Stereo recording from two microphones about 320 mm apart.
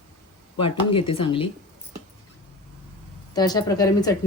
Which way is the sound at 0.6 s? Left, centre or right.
Centre.